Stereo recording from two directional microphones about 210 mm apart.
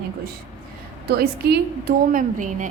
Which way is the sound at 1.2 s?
50° right (ahead or behind).